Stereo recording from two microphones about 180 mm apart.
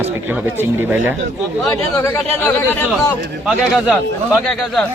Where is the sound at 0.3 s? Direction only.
10° right (ahead or behind).